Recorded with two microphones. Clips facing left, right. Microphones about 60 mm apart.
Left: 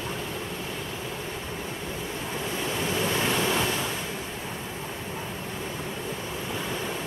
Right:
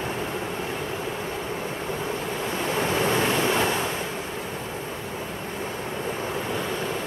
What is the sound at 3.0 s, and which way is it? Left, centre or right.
Waves, right.